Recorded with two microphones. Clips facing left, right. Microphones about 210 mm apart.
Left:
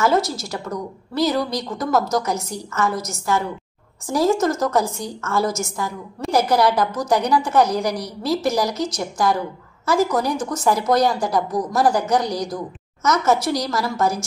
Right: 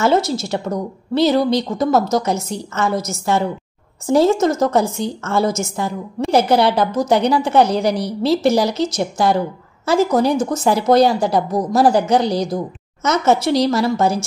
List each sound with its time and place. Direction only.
0.0 s a woman's voice: 25° right (ahead or behind)